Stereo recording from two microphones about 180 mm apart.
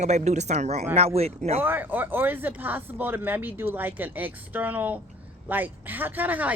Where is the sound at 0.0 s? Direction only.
40° right (ahead or behind).